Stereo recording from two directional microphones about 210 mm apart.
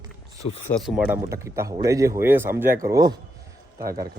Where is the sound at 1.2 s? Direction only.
15° right (ahead or behind).